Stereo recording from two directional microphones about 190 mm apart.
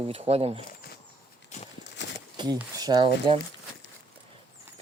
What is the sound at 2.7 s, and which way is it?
Speech, 20° right (ahead or behind).